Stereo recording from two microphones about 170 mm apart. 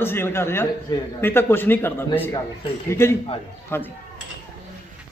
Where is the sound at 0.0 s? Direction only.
15° left (ahead or behind).